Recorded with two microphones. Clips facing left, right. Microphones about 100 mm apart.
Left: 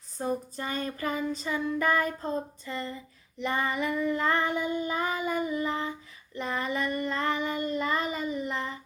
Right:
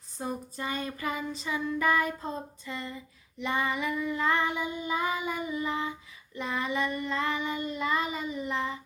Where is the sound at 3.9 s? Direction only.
5° right (ahead or behind).